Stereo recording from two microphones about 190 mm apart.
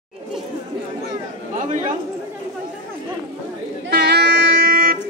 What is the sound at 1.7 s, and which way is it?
Speech, 45° right (ahead or behind).